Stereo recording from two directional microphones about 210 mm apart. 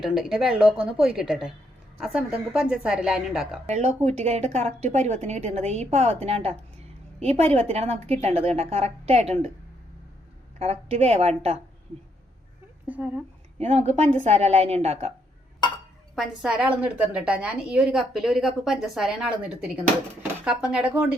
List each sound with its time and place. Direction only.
0.0 s a woman's voice: centre (ahead or behind)
3.7 s a woman's voice: 35° right (ahead or behind)
10.6 s a woman's voice: 30° right (ahead or behind)
12.9 s a woman's voice: 5° right (ahead or behind)
13.6 s speech: 30° right (ahead or behind)
16.1 s a woman's voice: centre (ahead or behind)